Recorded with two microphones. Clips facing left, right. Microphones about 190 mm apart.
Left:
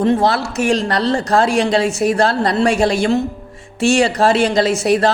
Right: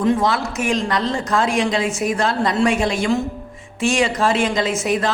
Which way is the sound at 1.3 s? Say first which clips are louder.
Left 4 dB; 35° left (ahead or behind).